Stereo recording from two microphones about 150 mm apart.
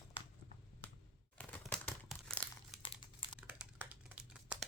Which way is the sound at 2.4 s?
35° left (ahead or behind).